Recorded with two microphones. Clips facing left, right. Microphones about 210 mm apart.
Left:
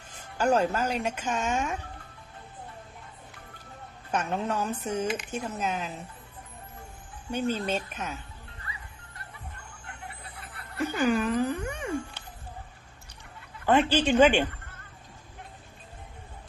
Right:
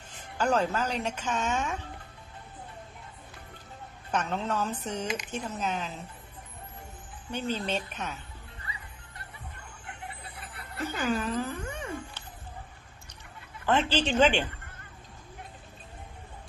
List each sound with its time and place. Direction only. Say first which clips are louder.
0.3 s speech: left 2 dB; 10° left (ahead or behind)
4.1 s speech: left 1 dB; 10° left (ahead or behind)
7.3 s speech: left 3 dB; 10° left (ahead or behind)
10.8 s music: left 4 dB; 15° left (ahead or behind)
13.7 s speech: left 4 dB; 10° left (ahead or behind)